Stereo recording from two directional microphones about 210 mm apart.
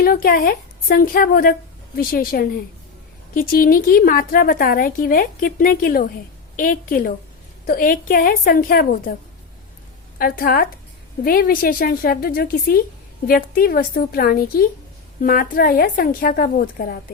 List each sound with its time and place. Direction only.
0.0 s a woman's voice: 45° left (ahead or behind)
10.2 s a woman's voice: 45° left (ahead or behind)